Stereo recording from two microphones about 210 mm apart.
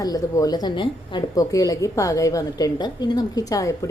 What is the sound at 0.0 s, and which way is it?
A woman's voice, 15° left (ahead or behind).